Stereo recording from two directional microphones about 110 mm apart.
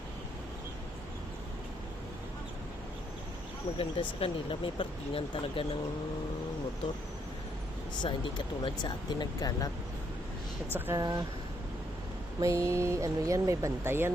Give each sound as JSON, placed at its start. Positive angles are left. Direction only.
{"t": 3.8, "sound": "speech", "side_deg": 55}
{"t": 8.0, "sound": "speech", "side_deg": 45}
{"t": 10.7, "sound": "speech", "side_deg": -20}
{"t": 10.9, "sound": "speech", "side_deg": -35}
{"t": 12.4, "sound": "speech", "side_deg": -30}